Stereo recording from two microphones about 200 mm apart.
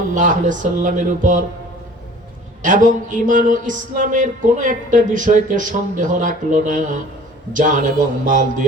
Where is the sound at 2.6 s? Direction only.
40° right (ahead or behind).